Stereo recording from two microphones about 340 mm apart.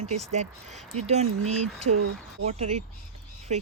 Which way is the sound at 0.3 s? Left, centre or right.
Centre.